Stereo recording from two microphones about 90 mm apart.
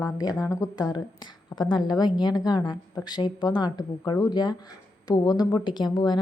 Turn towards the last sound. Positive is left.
turn(degrees=55)  # may be behind; listen again after turning